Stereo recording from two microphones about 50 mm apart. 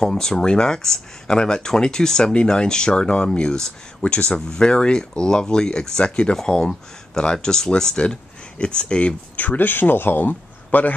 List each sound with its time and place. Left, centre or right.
0.0 s speech: centre
9.4 s speech: left